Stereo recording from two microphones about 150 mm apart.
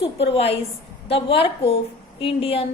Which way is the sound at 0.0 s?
40° left (ahead or behind).